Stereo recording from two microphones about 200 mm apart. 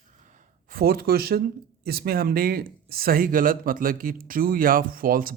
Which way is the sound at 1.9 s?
50° right (ahead or behind).